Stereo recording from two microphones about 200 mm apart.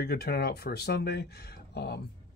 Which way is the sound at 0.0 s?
50° left (ahead or behind).